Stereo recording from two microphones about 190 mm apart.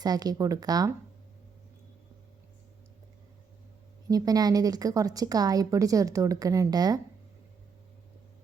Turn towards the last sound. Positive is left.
turn(degrees=-20)  # may be behind; listen again after turning